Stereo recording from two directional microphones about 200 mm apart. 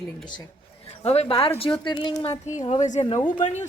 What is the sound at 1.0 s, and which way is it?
Speech, 30° left (ahead or behind).